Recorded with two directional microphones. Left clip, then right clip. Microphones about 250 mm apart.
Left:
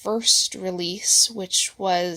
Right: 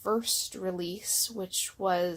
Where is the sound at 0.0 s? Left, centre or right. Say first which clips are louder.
Left 9 dB; left.